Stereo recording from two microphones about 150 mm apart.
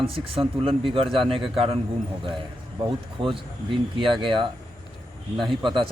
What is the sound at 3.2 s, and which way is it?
Speech, 35° right (ahead or behind).